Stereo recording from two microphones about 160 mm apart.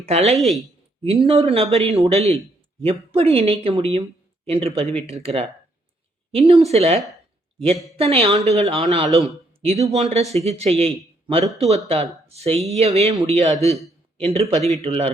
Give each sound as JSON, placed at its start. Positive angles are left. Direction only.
{"t": 0.0, "sound": "a man's voice", "side_deg": -40}